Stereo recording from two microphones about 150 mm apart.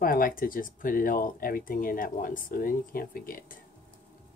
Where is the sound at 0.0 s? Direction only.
70° left (ahead or behind).